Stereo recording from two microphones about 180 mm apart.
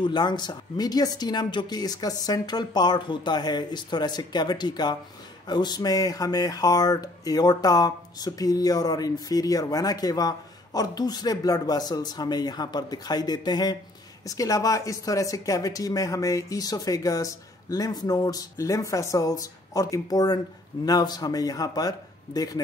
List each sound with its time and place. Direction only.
0.0 s speech: 25° left (ahead or behind)